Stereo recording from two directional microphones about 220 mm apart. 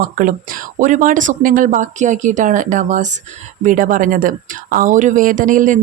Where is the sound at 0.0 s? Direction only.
40° right (ahead or behind).